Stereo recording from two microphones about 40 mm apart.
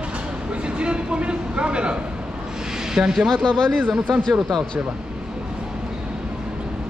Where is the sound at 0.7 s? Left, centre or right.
Right.